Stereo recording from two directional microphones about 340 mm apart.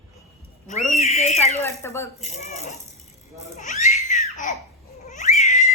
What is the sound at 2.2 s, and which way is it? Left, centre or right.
Speech, centre.